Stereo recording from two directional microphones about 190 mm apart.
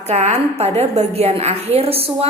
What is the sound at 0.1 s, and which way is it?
A woman's voice, 35° right (ahead or behind).